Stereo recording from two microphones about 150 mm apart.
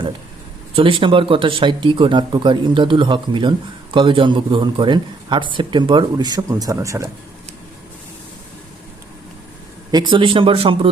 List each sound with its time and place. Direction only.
0.8 s speech: 35° right (ahead or behind)
9.9 s speech: 30° right (ahead or behind)